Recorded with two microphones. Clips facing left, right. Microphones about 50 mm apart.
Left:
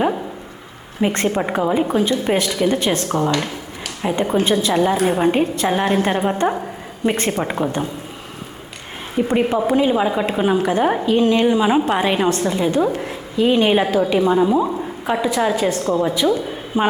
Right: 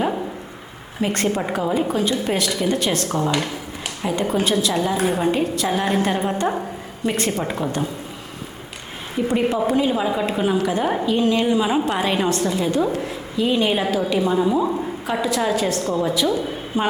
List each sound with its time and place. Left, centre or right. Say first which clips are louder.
1.0 s a woman's voice: left 3 dB; left
9.2 s a woman's voice: left 2 dB; centre
12.9 s a woman's voice: left 1 dB; left
13.3 s a woman's voice: left 5 dB; left